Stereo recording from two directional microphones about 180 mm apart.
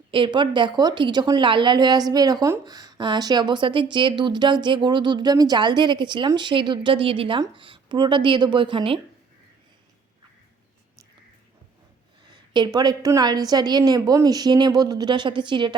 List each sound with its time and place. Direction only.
0.1 s a woman's voice: 25° right (ahead or behind)
12.3 s a woman's voice: 25° right (ahead or behind)